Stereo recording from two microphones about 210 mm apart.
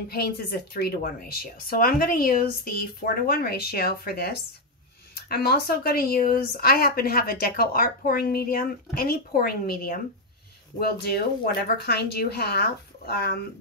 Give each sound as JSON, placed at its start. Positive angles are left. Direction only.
{"t": 0.1, "sound": "speech", "side_deg": 45}